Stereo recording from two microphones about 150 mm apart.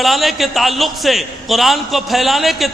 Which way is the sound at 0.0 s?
Centre (ahead or behind).